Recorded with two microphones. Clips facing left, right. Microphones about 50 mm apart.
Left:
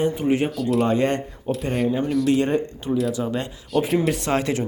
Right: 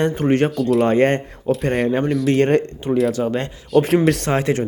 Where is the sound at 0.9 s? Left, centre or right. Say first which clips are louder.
Right 5 dB; right.